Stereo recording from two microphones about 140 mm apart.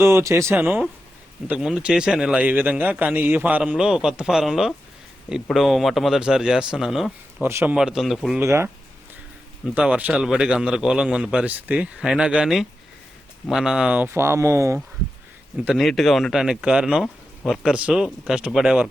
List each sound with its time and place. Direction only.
0.0 s speech: 20° right (ahead or behind)
1.5 s a man's voice: 5° right (ahead or behind)
7.4 s a man's voice: 15° right (ahead or behind)
7.8 s speech: 5° right (ahead or behind)
8.4 s speech: 20° right (ahead or behind)
9.7 s a man's voice: 10° right (ahead or behind)
15.5 s speech: 5° right (ahead or behind)